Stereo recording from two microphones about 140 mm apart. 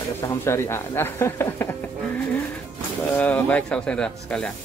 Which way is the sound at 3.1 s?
10° left (ahead or behind).